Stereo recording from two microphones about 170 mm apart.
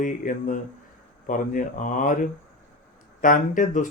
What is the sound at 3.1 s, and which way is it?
Speech, 50° left (ahead or behind).